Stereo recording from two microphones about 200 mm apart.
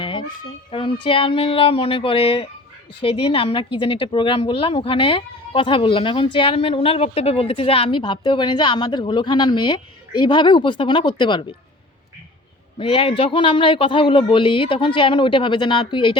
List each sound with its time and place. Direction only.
0.0 s a sound: 25° left (ahead or behind)
0.7 s speech: 25° left (ahead or behind)
12.8 s speech: 25° left (ahead or behind)